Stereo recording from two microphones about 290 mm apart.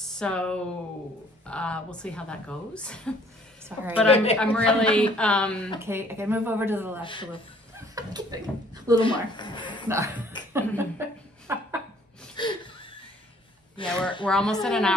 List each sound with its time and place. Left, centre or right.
0.0 s a woman's voice: centre
5.8 s speech: centre
7.0 s speech: centre
7.9 s speech: centre
9.0 s speech: centre
9.8 s speech: centre
10.8 s chuckle: centre
12.4 s laughter: centre
13.8 s a woman's voice: centre